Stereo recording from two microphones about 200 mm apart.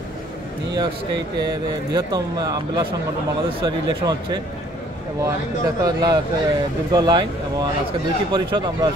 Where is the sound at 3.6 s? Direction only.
25° right (ahead or behind).